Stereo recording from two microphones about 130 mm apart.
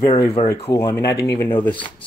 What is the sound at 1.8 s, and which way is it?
Speech, 40° left (ahead or behind).